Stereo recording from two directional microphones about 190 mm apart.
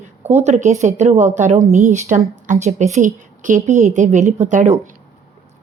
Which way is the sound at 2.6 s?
40° right (ahead or behind).